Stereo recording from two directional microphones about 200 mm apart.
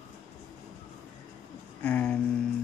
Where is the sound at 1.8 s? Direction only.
10° left (ahead or behind).